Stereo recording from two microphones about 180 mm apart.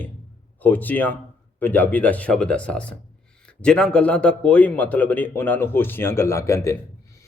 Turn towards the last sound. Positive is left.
turn(degrees=15)  # may be behind; listen again after turning